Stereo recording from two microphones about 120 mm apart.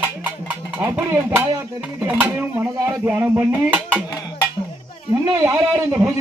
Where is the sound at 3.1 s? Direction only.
15° right (ahead or behind).